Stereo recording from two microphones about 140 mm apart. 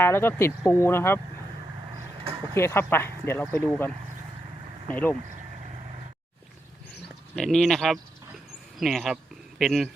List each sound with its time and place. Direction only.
0.0 s speech: 15° left (ahead or behind)
2.6 s speech: 20° left (ahead or behind)
7.3 s speech: 5° left (ahead or behind)